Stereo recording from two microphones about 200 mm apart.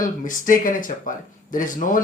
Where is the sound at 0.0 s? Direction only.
40° left (ahead or behind).